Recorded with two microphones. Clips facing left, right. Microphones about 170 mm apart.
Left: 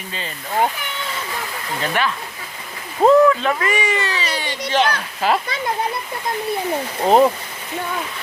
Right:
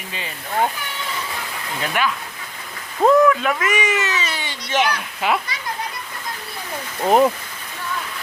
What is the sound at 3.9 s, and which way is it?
Speech, 35° left (ahead or behind).